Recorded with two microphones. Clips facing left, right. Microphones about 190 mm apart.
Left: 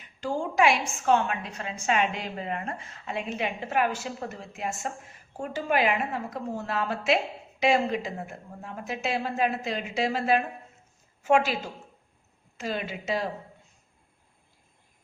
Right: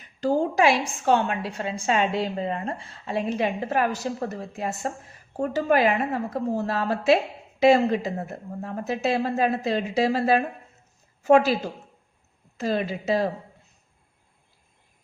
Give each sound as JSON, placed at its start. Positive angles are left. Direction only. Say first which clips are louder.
{"t": 0.0, "sound": "a woman's voice", "louder": "right 7 dB", "side_deg": -40}